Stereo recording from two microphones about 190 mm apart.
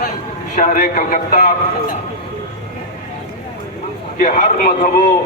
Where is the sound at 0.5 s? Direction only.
40° left (ahead or behind).